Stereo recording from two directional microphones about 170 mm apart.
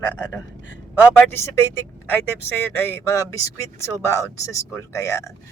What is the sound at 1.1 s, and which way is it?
Speech, 10° left (ahead or behind).